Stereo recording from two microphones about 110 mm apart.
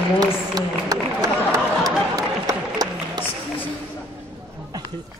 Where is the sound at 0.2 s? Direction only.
35° right (ahead or behind).